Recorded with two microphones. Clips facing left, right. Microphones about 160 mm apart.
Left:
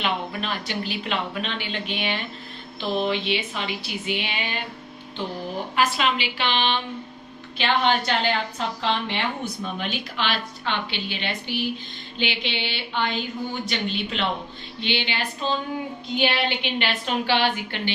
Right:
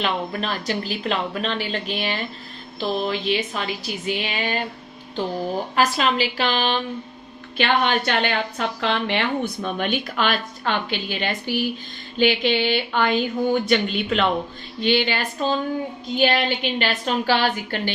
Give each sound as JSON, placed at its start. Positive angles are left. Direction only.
{"t": 0.0, "sound": "speech", "side_deg": -40}
{"t": 5.7, "sound": "speech", "side_deg": -40}
{"t": 7.6, "sound": "a woman's voice", "side_deg": -60}